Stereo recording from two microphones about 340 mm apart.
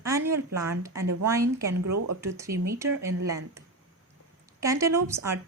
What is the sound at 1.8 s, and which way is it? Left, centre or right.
Speech, right.